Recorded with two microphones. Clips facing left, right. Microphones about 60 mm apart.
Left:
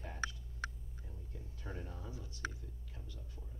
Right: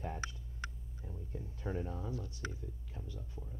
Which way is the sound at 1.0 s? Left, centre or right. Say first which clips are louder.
Right 8 dB; centre.